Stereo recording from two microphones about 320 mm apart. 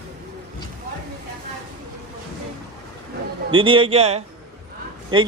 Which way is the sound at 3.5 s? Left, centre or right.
Centre.